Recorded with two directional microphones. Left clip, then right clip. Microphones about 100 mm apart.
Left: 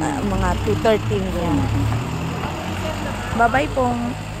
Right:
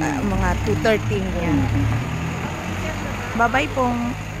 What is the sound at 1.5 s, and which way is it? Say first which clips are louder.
Vehicle: even; 25° left (ahead or behind).